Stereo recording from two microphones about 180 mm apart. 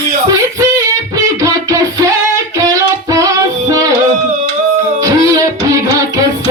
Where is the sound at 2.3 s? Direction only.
20° right (ahead or behind).